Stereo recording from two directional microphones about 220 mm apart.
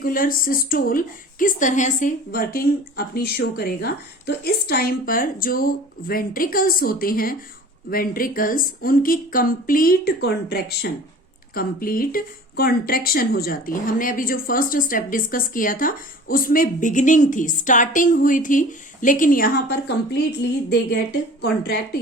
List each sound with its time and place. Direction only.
0.0 s speech: 40° left (ahead or behind)